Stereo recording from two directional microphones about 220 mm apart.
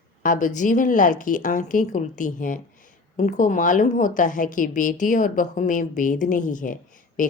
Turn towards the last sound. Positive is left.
turn(degrees=40)  # may be behind; listen again after turning